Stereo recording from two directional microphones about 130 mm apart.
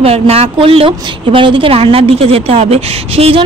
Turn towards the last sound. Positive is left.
turn(degrees=-50)  # may be behind; listen again after turning